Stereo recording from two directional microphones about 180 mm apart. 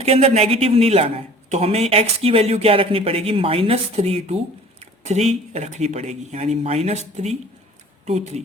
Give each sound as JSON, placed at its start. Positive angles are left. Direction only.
{"t": 0.0, "sound": "speech", "side_deg": -35}